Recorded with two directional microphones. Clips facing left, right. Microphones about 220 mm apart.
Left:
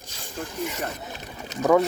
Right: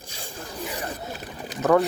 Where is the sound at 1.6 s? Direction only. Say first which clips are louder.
Even; 10° left (ahead or behind).